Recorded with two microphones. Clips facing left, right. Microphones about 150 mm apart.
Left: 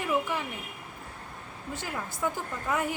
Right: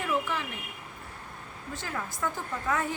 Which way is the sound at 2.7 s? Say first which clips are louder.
Left 1 dB; 10° left (ahead or behind).